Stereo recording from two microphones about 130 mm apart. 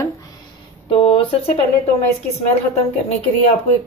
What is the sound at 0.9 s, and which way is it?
Speech, 45° left (ahead or behind).